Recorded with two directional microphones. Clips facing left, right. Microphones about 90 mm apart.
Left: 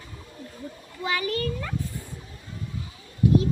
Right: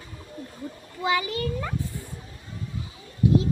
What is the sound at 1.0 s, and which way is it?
Speech, 20° right (ahead or behind).